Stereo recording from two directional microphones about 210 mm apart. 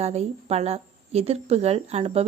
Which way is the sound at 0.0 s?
30° right (ahead or behind).